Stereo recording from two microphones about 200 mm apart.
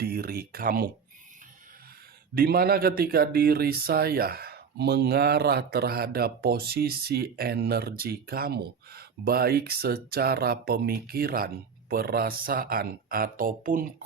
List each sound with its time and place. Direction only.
0.0 s speech: 50° right (ahead or behind)
2.3 s speech: 50° right (ahead or behind)